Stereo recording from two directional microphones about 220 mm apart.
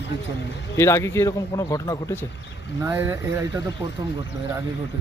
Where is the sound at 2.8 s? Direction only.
10° right (ahead or behind).